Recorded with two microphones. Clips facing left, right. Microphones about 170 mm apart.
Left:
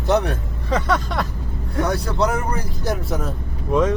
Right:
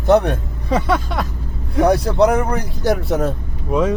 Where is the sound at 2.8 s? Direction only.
70° right (ahead or behind).